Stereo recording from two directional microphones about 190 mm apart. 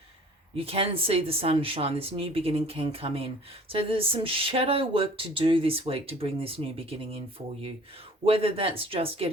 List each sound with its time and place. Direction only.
0.5 s speech: 30° right (ahead or behind)